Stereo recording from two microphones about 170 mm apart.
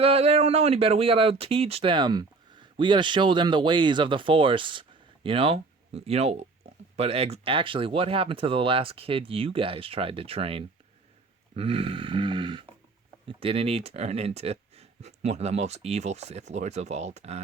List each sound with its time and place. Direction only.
0.0 s speech: 35° right (ahead or behind)